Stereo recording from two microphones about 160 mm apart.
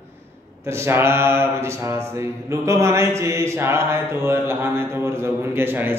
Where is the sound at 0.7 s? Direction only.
15° right (ahead or behind).